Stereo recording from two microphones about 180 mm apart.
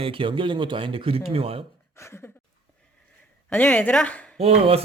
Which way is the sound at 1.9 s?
15° left (ahead or behind).